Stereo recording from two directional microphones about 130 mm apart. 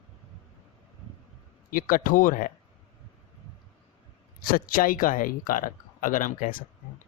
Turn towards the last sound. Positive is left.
turn(degrees=90)